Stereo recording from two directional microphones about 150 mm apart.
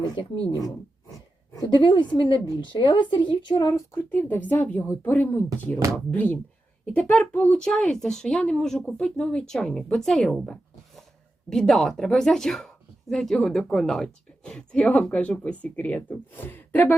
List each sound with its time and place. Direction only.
0.0 s a woman's voice: 30° left (ahead or behind); by 16.9 s 15° left (ahead or behind)